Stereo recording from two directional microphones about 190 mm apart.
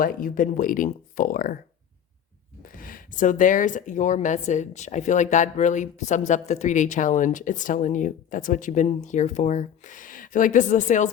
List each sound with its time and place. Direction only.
0.0 s speech: 45° left (ahead or behind)
2.6 s speech: 45° left (ahead or behind)